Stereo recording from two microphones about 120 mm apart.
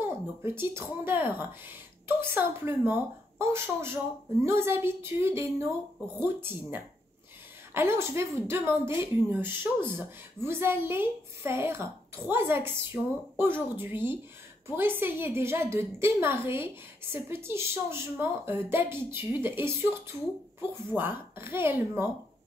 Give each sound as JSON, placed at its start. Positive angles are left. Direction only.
{"t": 0.0, "sound": "speech", "side_deg": -20}